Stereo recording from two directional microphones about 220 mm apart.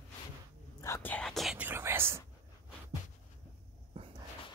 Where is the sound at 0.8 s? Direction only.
10° left (ahead or behind); by 2.2 s 10° right (ahead or behind).